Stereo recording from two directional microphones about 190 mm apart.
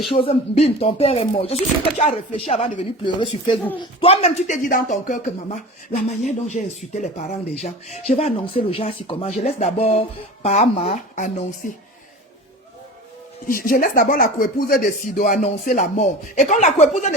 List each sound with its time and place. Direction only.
0.1 s speech: 30° left (ahead or behind)
13.5 s speech: 50° left (ahead or behind)